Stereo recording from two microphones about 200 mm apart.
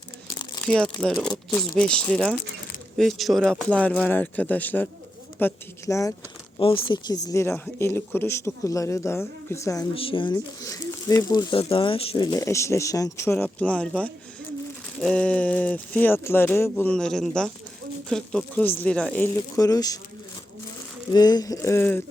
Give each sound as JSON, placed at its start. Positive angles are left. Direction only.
{"t": 0.6, "sound": "speech", "side_deg": 5}
{"t": 6.6, "sound": "speech", "side_deg": 25}
{"t": 7.3, "sound": "speech", "side_deg": 15}
{"t": 9.9, "sound": "speech", "side_deg": 25}
{"t": 19.5, "sound": "speech", "side_deg": 15}
{"t": 21.1, "sound": "speech", "side_deg": 20}